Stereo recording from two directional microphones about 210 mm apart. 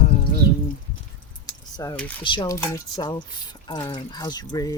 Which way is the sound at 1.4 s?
20° left (ahead or behind).